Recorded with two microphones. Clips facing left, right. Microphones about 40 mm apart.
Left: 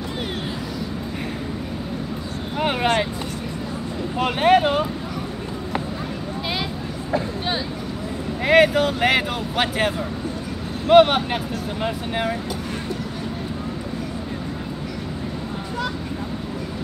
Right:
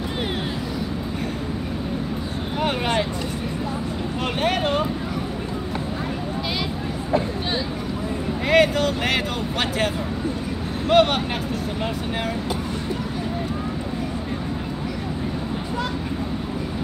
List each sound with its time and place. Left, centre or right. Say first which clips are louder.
2.6 s speech: left 2 dB; centre
4.2 s speech: left 7 dB; centre
8.4 s speech: left 3 dB; centre